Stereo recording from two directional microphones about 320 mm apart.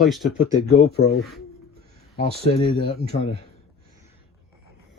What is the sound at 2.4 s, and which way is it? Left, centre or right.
Speech, centre.